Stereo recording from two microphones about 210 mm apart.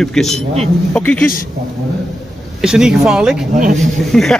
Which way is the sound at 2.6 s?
5° right (ahead or behind).